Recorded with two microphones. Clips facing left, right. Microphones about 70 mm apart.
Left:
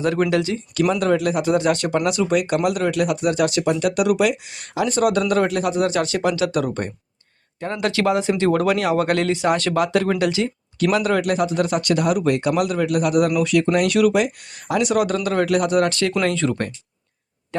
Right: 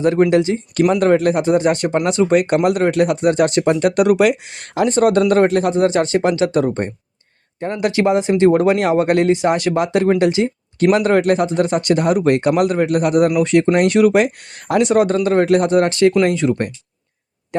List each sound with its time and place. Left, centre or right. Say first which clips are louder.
0.0 s speech: right 6 dB; right
0.5 s speech: right 4 dB; right
1.5 s speech: right 3 dB; right
4.9 s speech: right 5 dB; right
7.6 s speech: right 4 dB; centre
10.9 s speech: right 4 dB; right
14.1 s speech: right 5 dB; right; by 16.7 s centre